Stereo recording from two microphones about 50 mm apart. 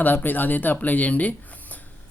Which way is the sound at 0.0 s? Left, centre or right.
Left.